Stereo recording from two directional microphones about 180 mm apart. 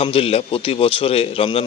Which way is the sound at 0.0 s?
35° left (ahead or behind).